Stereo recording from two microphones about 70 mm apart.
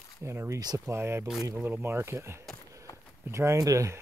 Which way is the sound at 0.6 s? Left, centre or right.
Right.